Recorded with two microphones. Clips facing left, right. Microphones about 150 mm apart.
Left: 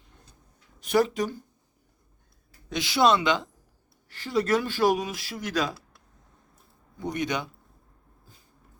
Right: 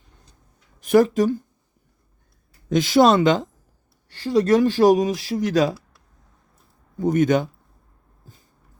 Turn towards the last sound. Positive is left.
turn(degrees=-45)  # may be behind; listen again after turning